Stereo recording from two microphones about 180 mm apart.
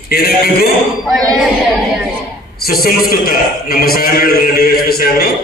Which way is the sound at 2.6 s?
55° left (ahead or behind).